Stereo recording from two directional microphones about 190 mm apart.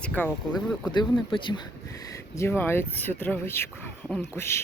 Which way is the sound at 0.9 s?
25° left (ahead or behind).